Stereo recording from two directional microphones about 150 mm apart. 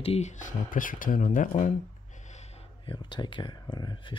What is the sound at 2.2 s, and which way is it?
Gasp, 50° left (ahead or behind).